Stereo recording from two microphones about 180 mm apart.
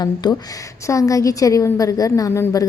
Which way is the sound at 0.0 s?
20° left (ahead or behind).